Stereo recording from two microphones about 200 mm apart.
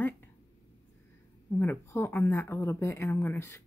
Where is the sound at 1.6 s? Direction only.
10° left (ahead or behind).